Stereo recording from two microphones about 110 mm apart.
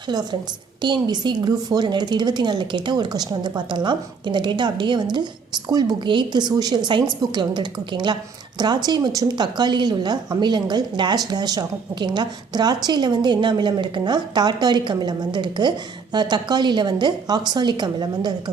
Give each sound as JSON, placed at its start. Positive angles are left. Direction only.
{"t": 0.1, "sound": "a woman's voice", "side_deg": -40}